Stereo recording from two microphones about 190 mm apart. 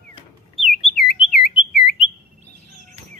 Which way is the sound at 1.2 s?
30° left (ahead or behind).